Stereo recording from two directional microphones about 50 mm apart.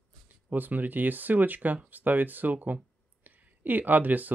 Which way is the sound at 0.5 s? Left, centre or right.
Right.